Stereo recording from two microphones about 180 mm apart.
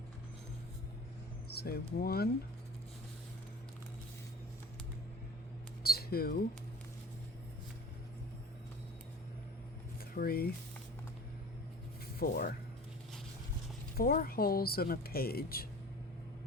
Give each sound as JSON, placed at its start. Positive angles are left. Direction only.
{"t": 1.5, "sound": "speech", "side_deg": 60}
{"t": 5.8, "sound": "a sound", "side_deg": 60}
{"t": 10.0, "sound": "speech", "side_deg": 55}
{"t": 12.2, "sound": "speech", "side_deg": 55}
{"t": 13.9, "sound": "speech", "side_deg": 55}